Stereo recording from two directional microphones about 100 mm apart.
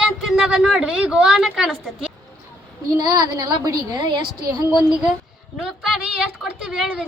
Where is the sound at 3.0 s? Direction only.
45° right (ahead or behind).